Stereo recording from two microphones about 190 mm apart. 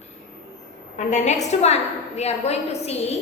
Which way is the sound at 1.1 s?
40° left (ahead or behind).